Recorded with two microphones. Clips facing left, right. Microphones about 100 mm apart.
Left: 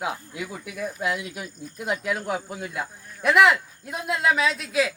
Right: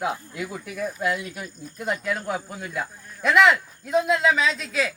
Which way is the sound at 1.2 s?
10° left (ahead or behind).